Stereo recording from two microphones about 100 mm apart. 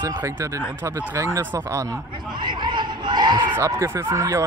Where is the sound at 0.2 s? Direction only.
30° right (ahead or behind).